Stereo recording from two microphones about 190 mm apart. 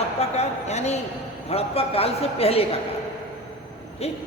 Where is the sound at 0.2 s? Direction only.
35° left (ahead or behind).